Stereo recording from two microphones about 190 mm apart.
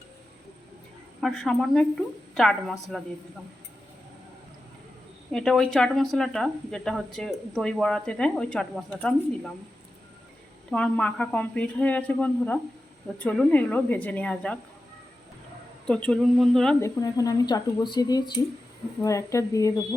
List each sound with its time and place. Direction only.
1.2 s speech: 5° left (ahead or behind)
5.3 s speech: centre (ahead or behind)
10.7 s speech: 5° left (ahead or behind)
15.9 s speech: 5° left (ahead or behind)
16.8 s speech: 20° left (ahead or behind)